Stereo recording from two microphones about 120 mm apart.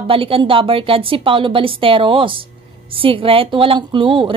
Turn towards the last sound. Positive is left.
turn(degrees=-45)  # may be behind; listen again after turning